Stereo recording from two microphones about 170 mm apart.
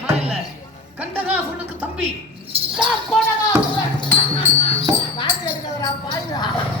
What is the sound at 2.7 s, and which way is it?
Speech, centre (ahead or behind).